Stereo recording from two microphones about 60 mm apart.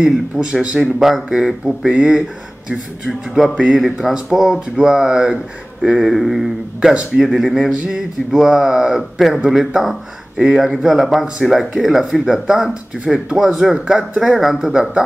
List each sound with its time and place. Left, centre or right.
0.0 s speech: centre
3.1 s speech: centre
3.5 s speech: centre
6.9 s speech: centre
7.2 s speech: centre